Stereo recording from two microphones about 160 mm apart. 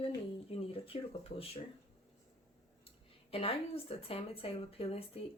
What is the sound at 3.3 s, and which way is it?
Speech, 35° left (ahead or behind).